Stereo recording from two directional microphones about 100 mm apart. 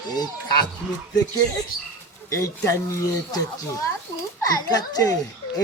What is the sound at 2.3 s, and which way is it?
Speech, 30° left (ahead or behind).